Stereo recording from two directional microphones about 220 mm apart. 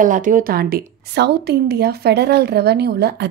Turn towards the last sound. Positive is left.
turn(degrees=-45)  # may be behind; listen again after turning